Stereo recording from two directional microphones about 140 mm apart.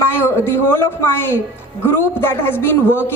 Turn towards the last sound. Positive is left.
turn(degrees=15)  # may be behind; listen again after turning